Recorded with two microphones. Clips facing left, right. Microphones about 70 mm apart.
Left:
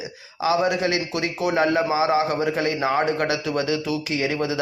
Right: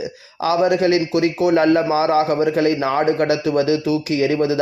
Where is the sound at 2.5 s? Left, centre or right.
Right.